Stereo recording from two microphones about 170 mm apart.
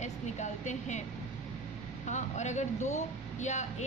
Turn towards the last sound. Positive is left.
turn(degrees=45)  # may be behind; listen again after turning